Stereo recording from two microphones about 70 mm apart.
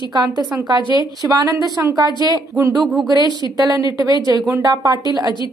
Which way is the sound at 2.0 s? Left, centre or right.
Right.